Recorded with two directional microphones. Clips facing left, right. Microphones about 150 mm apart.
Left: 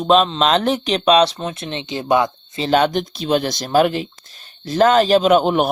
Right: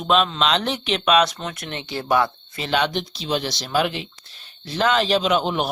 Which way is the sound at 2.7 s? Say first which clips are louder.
Left 6 dB; 45° left (ahead or behind).